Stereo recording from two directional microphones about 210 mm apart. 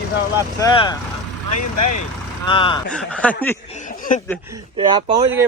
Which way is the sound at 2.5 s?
25° left (ahead or behind).